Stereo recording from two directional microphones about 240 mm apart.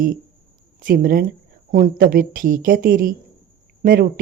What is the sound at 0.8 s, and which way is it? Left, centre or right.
A woman's voice, right.